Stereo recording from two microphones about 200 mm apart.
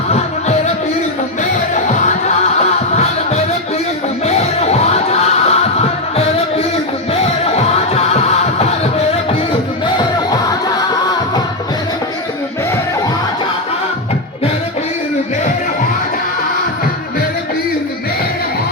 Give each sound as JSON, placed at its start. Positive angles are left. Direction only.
{"t": 0.1, "sound": "music", "side_deg": 35}